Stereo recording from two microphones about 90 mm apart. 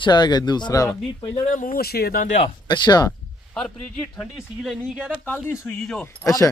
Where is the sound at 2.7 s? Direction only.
50° left (ahead or behind).